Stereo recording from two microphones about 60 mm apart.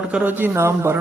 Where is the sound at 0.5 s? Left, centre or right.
Right.